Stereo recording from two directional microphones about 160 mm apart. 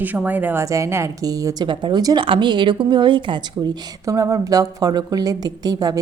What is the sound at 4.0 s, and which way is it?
A woman's voice, 20° right (ahead or behind).